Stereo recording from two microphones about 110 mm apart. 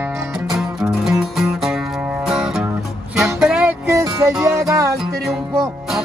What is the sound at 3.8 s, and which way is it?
Music, 25° right (ahead or behind).